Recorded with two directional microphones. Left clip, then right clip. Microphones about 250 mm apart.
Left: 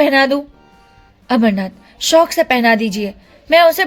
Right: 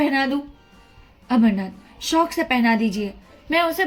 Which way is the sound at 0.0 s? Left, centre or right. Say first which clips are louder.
Left 9 dB; left.